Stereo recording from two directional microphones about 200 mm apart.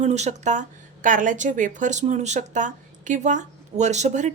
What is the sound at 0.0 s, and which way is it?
Speech, 35° right (ahead or behind).